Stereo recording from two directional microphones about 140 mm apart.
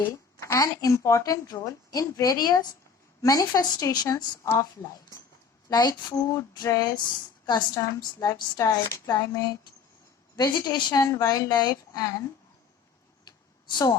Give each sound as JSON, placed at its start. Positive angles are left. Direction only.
{"t": 0.1, "sound": "speech", "side_deg": 25}
{"t": 5.6, "sound": "speech", "side_deg": 25}
{"t": 13.2, "sound": "a sound", "side_deg": 30}